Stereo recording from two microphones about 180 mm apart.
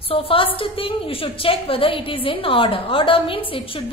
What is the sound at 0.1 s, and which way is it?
A woman's voice, 30° left (ahead or behind).